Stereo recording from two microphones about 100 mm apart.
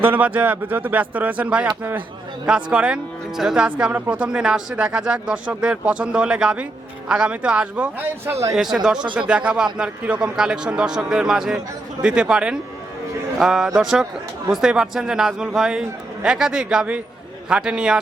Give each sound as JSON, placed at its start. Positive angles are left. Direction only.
{"t": 0.0, "sound": "speech", "side_deg": -15}
{"t": 8.3, "sound": "speech", "side_deg": -35}
{"t": 8.5, "sound": "a man's voice", "side_deg": -5}